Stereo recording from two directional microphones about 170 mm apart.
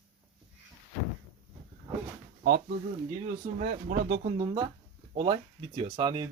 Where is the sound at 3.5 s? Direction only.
50° right (ahead or behind).